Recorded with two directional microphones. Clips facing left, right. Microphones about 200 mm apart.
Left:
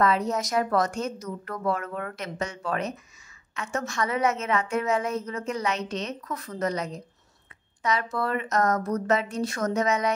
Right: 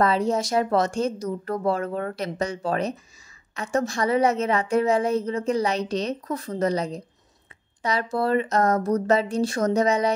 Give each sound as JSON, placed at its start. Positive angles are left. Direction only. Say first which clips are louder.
{"t": 0.0, "sound": "a woman's voice", "louder": "right 3 dB", "side_deg": -30}